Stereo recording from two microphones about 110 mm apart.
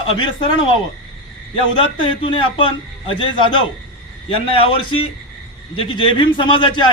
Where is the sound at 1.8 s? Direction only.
50° left (ahead or behind).